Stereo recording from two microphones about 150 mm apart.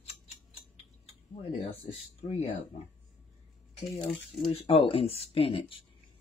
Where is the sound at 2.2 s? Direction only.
35° left (ahead or behind).